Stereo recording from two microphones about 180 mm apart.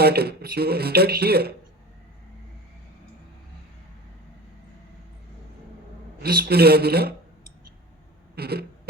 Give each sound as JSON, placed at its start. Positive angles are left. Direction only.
{"t": 0.0, "sound": "speech", "side_deg": -60}
{"t": 6.2, "sound": "speech", "side_deg": -60}
{"t": 8.4, "sound": "speech", "side_deg": -60}